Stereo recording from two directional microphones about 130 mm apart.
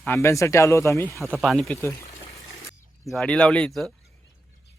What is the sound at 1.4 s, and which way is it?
Speech, centre (ahead or behind).